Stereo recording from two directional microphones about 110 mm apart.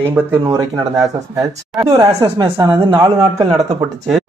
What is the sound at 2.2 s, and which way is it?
A man's voice, 40° right (ahead or behind).